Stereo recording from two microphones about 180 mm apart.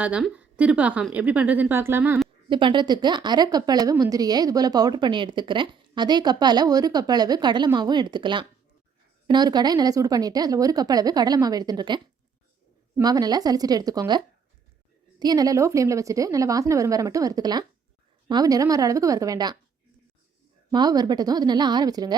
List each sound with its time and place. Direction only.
0.0 s a woman's voice: 5° right (ahead or behind)
2.5 s a woman's voice: 25° right (ahead or behind)
13.0 s a woman's voice: 20° right (ahead or behind)
15.2 s a woman's voice: 20° right (ahead or behind)
20.7 s a woman's voice: 20° right (ahead or behind)